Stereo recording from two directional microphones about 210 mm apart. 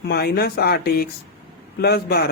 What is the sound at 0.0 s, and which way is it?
Speech, 50° left (ahead or behind).